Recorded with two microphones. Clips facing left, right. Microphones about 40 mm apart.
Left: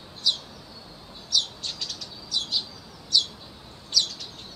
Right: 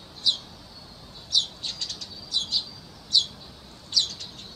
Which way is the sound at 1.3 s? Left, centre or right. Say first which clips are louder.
Even; right.